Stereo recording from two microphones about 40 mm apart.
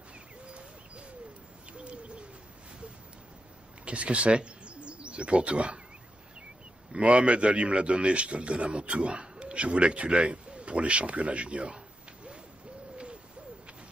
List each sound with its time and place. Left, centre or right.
0.5 s bird: right
3.8 s speech: right
6.9 s a man's voice: right